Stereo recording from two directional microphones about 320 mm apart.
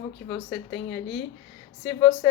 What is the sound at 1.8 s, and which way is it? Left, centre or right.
Speech, centre.